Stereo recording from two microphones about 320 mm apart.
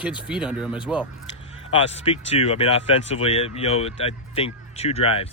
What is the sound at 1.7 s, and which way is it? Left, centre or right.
Speech, centre.